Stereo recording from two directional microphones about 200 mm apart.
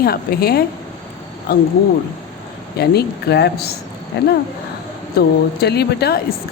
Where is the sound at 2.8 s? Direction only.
55° left (ahead or behind).